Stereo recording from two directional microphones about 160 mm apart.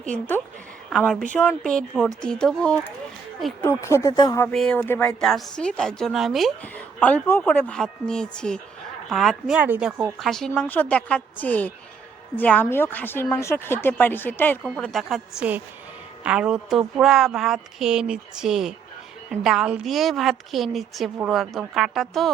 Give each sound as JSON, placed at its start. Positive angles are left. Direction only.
{"t": 0.1, "sound": "a woman's voice", "side_deg": 10}
{"t": 4.4, "sound": "a woman's voice", "side_deg": 5}
{"t": 9.6, "sound": "speech", "side_deg": -10}
{"t": 10.2, "sound": "a woman's voice", "side_deg": 0}